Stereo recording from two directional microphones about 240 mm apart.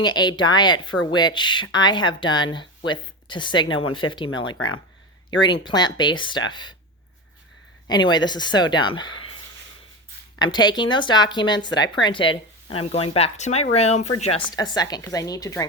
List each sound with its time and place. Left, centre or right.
0.0 s speech: centre
4.5 s speech: left
5.4 s speech: centre
7.9 s speech: centre
10.3 s speech: centre